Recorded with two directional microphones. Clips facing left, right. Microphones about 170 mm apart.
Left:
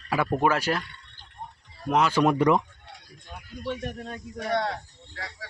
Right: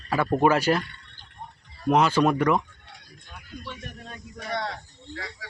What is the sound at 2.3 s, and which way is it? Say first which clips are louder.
Speech: left 1 dB; 30° left (ahead or behind).